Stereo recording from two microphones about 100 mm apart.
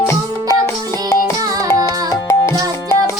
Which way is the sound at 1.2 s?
40° right (ahead or behind).